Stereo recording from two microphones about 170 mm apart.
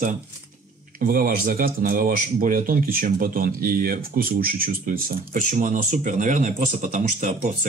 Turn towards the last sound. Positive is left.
turn(degrees=-50)  # may be behind; listen again after turning